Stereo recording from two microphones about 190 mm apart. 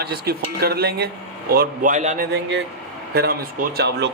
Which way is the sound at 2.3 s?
70° right (ahead or behind).